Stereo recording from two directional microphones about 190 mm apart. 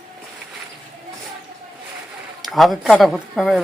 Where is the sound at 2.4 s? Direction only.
Centre (ahead or behind).